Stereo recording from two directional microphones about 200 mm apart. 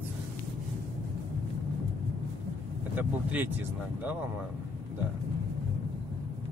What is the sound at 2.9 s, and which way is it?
Speech, 10° right (ahead or behind).